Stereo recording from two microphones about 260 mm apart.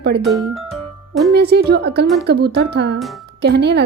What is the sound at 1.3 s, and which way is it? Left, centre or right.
Speech, right.